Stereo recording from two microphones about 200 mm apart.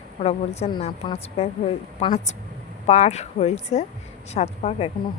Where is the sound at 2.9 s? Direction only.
35° left (ahead or behind).